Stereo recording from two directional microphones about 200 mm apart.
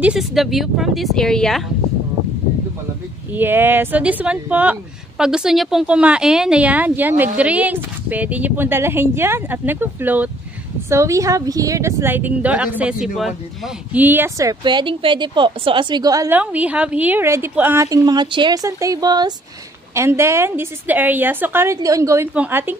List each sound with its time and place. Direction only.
0.0 s speech: 5° right (ahead or behind)
3.3 s speech: 10° right (ahead or behind)